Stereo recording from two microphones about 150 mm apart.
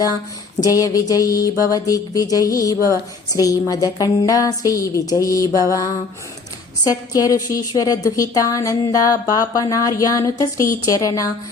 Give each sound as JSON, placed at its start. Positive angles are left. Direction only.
{"t": 0.6, "sound": "a woman's voice", "side_deg": 25}